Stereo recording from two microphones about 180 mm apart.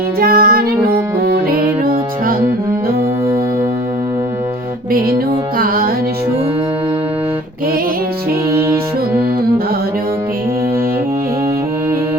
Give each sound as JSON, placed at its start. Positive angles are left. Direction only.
{"t": 0.2, "sound": "music", "side_deg": -55}
{"t": 4.9, "sound": "music", "side_deg": -55}